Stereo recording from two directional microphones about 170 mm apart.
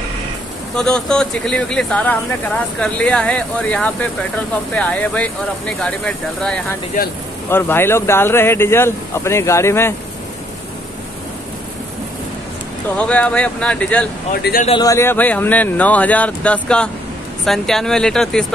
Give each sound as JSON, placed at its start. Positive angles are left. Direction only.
{"t": 0.7, "sound": "speech", "side_deg": 5}
{"t": 12.9, "sound": "speech", "side_deg": 5}
{"t": 14.3, "sound": "speech", "side_deg": 65}
{"t": 14.7, "sound": "speech", "side_deg": 20}